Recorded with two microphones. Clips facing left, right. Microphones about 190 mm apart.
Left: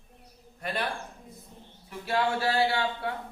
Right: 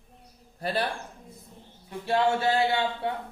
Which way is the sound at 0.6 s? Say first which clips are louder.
Right 4 dB; 30° right (ahead or behind).